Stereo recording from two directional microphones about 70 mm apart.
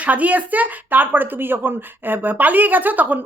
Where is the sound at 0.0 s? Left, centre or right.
Right.